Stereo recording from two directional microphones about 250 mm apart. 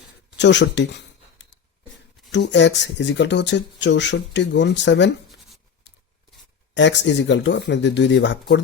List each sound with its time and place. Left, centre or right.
0.3 s a sound: left
2.3 s speech: left
6.7 s speech: left